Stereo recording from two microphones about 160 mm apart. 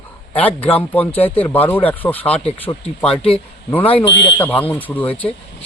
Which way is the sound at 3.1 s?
35° left (ahead or behind).